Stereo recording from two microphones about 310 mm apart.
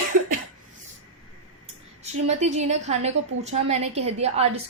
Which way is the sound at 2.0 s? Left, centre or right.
Right.